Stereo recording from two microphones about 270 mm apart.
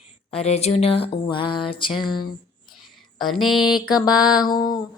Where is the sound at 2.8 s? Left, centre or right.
Centre.